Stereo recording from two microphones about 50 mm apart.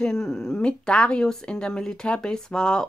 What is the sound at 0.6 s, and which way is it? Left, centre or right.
Speech, left.